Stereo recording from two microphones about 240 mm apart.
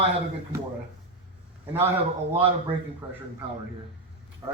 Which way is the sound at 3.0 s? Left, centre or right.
Centre.